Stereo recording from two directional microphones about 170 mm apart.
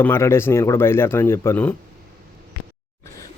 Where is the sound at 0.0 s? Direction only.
15° left (ahead or behind).